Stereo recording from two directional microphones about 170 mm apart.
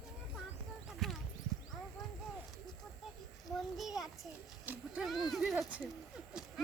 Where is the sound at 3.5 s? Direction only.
Centre (ahead or behind).